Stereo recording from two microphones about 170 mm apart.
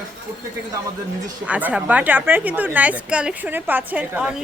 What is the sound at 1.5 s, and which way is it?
A woman's voice, 10° right (ahead or behind).